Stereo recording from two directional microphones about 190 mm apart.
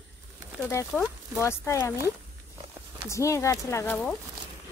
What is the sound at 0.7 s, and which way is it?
Speech, 15° left (ahead or behind).